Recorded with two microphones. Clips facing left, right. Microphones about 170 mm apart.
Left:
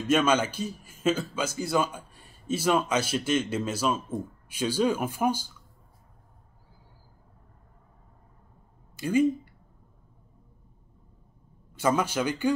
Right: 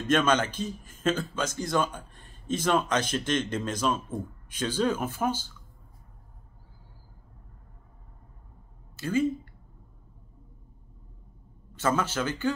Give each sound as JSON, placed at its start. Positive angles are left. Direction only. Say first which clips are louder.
{"t": 0.0, "sound": "speech", "louder": "left 1 dB", "side_deg": 10}
{"t": 8.9, "sound": "speech", "louder": "left 3 dB", "side_deg": 15}
{"t": 11.7, "sound": "speech", "louder": "left 2 dB", "side_deg": 10}